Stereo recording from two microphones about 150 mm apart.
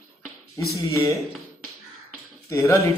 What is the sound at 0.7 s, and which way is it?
Speech, 20° left (ahead or behind).